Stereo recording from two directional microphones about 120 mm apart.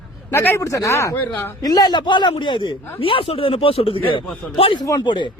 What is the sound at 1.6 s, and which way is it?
Speech, 30° left (ahead or behind).